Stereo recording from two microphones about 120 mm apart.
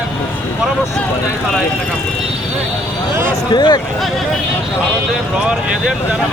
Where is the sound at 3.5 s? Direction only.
35° left (ahead or behind).